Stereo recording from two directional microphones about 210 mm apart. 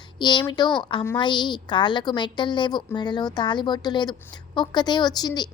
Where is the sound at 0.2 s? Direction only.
20° left (ahead or behind).